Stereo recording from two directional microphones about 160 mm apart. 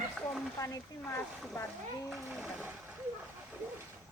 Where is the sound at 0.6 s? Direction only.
20° left (ahead or behind).